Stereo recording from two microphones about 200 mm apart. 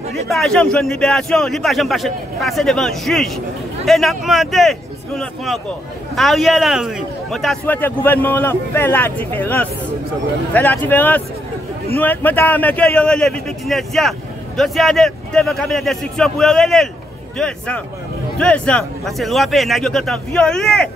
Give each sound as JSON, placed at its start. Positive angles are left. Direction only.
{"t": 0.1, "sound": "speech", "side_deg": 0}